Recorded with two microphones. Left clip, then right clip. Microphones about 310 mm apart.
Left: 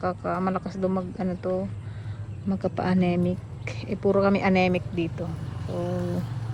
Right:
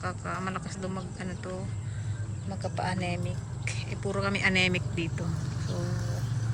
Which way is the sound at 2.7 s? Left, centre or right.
Centre.